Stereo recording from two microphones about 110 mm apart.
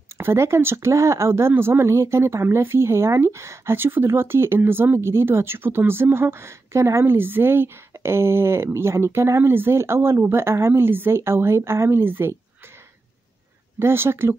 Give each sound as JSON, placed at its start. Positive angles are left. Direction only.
{"t": 0.2, "sound": "speech", "side_deg": -25}
{"t": 13.7, "sound": "speech", "side_deg": -20}